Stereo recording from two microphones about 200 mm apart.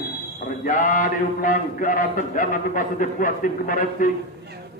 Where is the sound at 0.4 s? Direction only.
40° left (ahead or behind).